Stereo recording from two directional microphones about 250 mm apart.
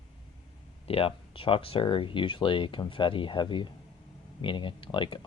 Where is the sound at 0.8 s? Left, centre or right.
Left.